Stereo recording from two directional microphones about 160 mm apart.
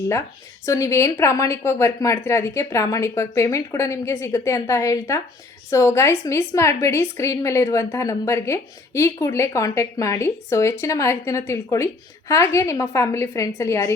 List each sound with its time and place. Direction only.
0.6 s a woman's voice: 20° left (ahead or behind)